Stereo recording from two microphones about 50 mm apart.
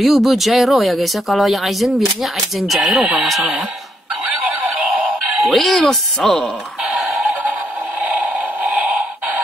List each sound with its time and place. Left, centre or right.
0.0 s speech: centre
3.0 s speech: centre
5.4 s speech: centre
7.1 s music: right